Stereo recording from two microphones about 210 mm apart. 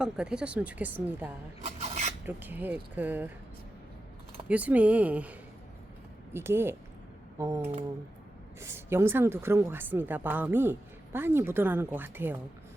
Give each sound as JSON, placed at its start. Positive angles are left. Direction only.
{"t": 0.0, "sound": "a woman's voice", "side_deg": -5}
{"t": 1.6, "sound": "filing", "side_deg": -30}
{"t": 2.2, "sound": "a woman's voice", "side_deg": -10}
{"t": 4.4, "sound": "a woman's voice", "side_deg": -5}